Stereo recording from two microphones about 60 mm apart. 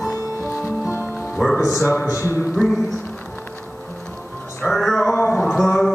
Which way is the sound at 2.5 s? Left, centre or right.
Centre.